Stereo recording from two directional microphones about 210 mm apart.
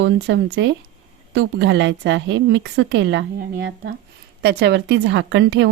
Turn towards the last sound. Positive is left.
turn(degrees=-60)  # may be behind; listen again after turning